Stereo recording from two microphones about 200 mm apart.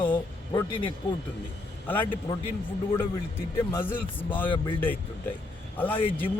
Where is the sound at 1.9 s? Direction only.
10° left (ahead or behind).